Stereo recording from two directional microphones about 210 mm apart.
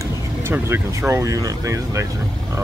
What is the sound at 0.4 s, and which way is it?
Speech, 10° right (ahead or behind).